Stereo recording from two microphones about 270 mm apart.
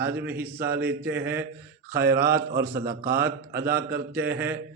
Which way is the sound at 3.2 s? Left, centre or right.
Centre.